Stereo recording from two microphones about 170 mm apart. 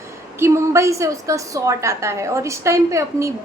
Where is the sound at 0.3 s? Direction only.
15° right (ahead or behind).